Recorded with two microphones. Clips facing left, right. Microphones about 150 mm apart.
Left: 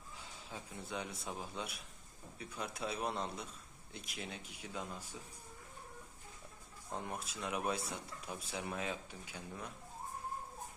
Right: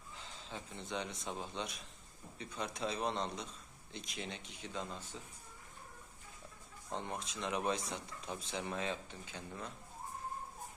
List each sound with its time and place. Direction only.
0.2 s a man's voice: 10° left (ahead or behind)
6.9 s speech: 5° left (ahead or behind)